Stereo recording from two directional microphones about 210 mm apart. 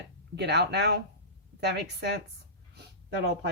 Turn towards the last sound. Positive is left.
turn(degrees=-50)  # may be behind; listen again after turning